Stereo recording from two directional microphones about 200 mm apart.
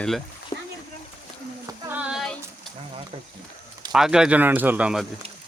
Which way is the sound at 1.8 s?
5° right (ahead or behind).